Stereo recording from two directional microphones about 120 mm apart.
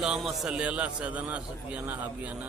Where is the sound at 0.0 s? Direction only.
5° right (ahead or behind).